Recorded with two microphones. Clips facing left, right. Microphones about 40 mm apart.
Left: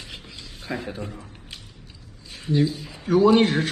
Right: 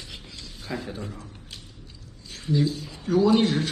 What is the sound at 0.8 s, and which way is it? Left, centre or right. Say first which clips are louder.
Squish: left 2 dB; left.